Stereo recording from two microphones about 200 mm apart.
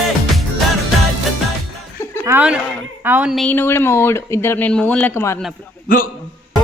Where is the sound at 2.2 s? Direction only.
10° right (ahead or behind).